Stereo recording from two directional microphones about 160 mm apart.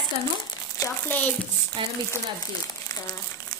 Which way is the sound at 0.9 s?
10° left (ahead or behind).